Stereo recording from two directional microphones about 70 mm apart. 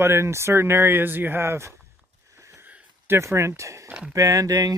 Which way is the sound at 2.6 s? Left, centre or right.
Right.